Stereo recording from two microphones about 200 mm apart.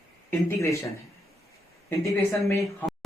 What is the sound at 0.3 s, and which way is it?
Speech, 15° left (ahead or behind).